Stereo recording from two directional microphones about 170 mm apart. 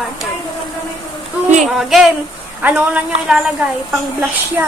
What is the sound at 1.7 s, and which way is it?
A woman's voice, centre (ahead or behind).